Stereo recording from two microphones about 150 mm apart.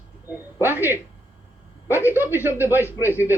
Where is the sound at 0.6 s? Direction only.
15° right (ahead or behind).